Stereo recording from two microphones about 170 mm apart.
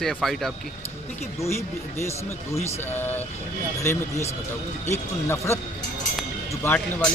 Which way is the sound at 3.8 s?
15° left (ahead or behind).